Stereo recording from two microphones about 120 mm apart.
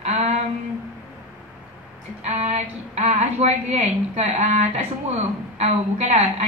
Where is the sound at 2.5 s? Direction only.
65° right (ahead or behind).